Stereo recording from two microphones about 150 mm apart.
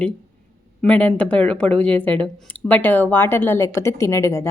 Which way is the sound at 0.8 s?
5° left (ahead or behind).